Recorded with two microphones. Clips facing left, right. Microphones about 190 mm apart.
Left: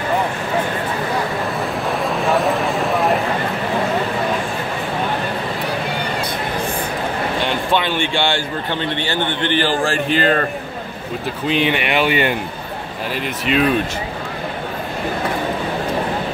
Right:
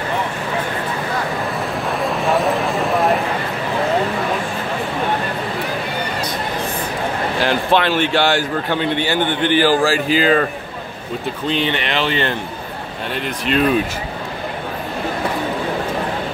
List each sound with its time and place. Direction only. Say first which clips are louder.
1.9 s a sound: even; centre (ahead or behind)
7.3 s speech: right 4 dB; centre (ahead or behind)
11.4 s speech: left 3 dB; 10° left (ahead or behind)